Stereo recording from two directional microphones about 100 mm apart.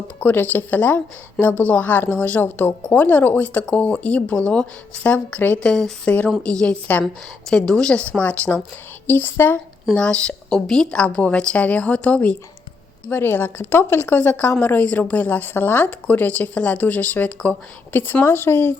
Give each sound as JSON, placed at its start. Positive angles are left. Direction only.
{"t": 0.2, "sound": "a woman's voice", "side_deg": 15}
{"t": 9.9, "sound": "a woman's voice", "side_deg": 10}